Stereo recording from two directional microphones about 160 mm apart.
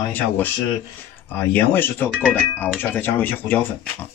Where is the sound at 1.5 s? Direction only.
10° left (ahead or behind).